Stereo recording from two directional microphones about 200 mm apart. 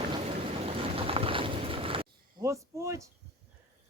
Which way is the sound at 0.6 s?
25° right (ahead or behind).